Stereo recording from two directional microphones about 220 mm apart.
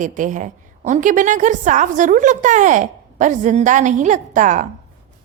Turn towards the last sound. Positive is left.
turn(degrees=-35)  # may be behind; listen again after turning